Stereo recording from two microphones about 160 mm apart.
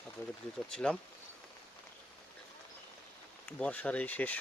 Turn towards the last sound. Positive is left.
turn(degrees=10)  # may be behind; listen again after turning